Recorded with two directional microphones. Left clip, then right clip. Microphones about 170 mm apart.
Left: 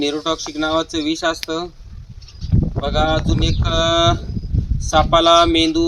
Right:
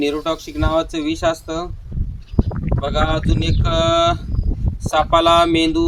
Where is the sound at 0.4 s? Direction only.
15° right (ahead or behind).